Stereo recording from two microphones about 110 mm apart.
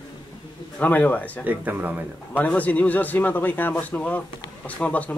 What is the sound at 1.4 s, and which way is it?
Speech, 15° right (ahead or behind).